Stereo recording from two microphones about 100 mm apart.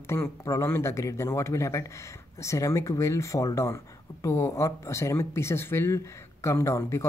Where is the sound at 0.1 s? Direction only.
25° left (ahead or behind).